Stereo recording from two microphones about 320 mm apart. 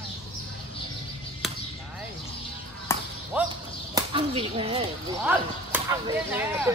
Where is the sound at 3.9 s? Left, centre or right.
Centre.